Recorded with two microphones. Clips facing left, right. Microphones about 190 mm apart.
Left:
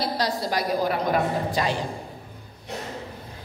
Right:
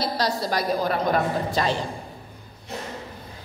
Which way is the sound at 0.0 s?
20° left (ahead or behind).